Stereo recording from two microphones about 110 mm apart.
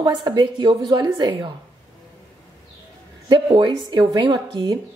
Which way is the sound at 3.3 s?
50° right (ahead or behind).